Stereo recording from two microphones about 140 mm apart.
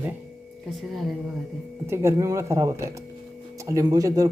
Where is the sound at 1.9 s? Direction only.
20° right (ahead or behind).